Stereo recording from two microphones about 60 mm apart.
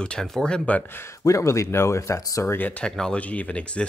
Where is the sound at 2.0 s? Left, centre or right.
Left.